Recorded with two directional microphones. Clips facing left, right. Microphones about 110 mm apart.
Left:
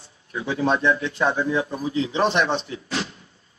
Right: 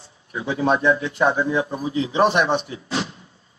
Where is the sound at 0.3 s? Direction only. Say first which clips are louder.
Right 2 dB; 20° right (ahead or behind).